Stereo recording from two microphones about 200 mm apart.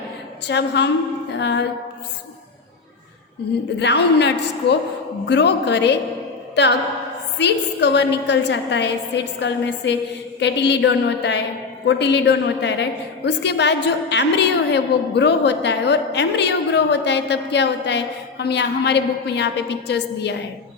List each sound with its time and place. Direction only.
0.4 s a woman's voice: 60° left (ahead or behind)
3.8 s a woman's voice: 60° left (ahead or behind)
5.3 s a woman's voice: 60° left (ahead or behind)
7.3 s a woman's voice: 60° left (ahead or behind)